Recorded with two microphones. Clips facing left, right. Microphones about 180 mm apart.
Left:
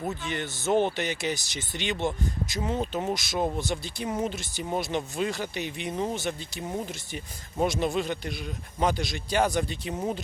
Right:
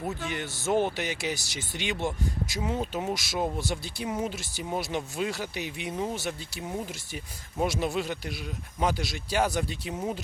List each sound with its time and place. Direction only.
0.3 s speech: 10° right (ahead or behind)